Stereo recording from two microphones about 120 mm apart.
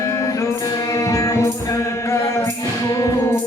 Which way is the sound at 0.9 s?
30° left (ahead or behind).